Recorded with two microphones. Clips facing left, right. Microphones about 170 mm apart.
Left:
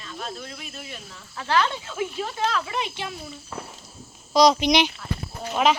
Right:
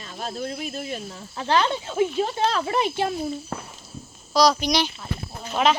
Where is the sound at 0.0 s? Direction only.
35° right (ahead or behind).